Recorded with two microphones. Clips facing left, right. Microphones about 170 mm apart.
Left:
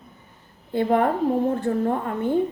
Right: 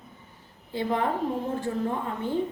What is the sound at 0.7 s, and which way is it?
A woman's voice, 55° left (ahead or behind).